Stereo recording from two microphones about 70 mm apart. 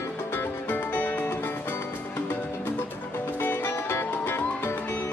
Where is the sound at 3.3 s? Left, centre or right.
Left.